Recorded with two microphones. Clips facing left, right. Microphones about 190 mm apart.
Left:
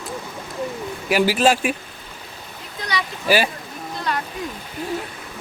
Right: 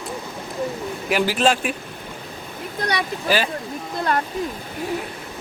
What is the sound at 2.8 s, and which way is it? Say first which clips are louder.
Speech: right 3 dB; 60° right (ahead or behind).